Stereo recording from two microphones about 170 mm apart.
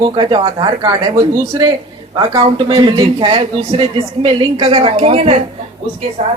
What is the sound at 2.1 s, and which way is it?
A man's voice, 30° right (ahead or behind).